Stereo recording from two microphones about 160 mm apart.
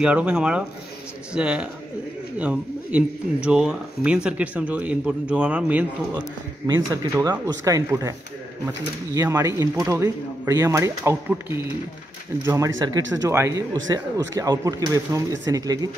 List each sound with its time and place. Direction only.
0.0 s a man's voice: 10° right (ahead or behind)
6.7 s a man's voice: 25° right (ahead or behind)